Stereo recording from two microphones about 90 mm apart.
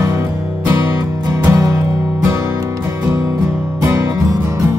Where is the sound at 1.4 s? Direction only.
30° right (ahead or behind).